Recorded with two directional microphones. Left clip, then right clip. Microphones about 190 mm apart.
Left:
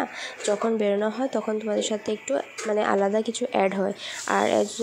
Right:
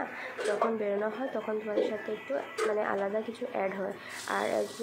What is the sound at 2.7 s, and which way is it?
Speech, 50° left (ahead or behind).